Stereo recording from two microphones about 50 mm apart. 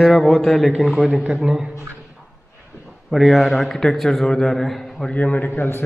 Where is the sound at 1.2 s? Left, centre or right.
Centre.